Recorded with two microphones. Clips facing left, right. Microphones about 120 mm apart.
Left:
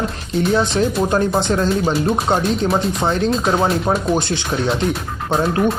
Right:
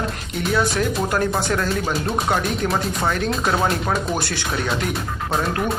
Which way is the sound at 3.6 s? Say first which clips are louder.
Left 4 dB; centre (ahead or behind).